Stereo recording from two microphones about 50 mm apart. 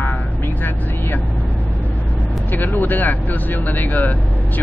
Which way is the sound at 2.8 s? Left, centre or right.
Left.